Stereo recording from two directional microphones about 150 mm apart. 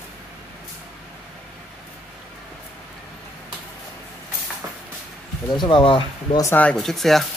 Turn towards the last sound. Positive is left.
turn(degrees=0)  # may be behind; listen again after turning